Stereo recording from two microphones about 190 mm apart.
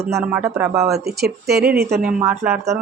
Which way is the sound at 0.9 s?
55° right (ahead or behind).